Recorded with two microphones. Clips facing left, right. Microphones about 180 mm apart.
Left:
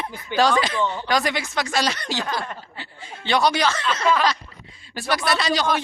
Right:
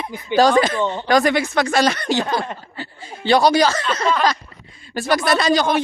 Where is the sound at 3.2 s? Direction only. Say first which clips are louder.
Right 6 dB; 35° right (ahead or behind).